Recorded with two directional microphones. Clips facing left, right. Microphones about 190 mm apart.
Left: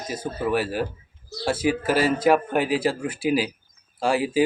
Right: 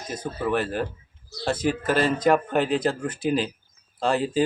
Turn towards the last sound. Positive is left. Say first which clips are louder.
# left 1 dB
turn(degrees=10)  # may be behind; listen again after turning